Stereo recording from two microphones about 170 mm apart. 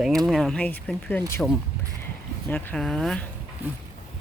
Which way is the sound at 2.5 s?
5° left (ahead or behind).